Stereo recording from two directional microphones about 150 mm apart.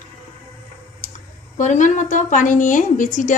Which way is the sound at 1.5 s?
55° left (ahead or behind).